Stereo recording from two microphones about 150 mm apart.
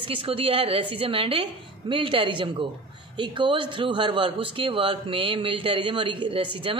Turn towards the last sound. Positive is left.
turn(degrees=-35)  # may be behind; listen again after turning